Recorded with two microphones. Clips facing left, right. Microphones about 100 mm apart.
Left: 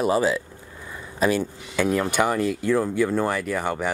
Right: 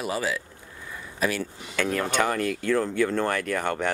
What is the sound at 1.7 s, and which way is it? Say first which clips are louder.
Speech: left 3 dB; 10° left (ahead or behind).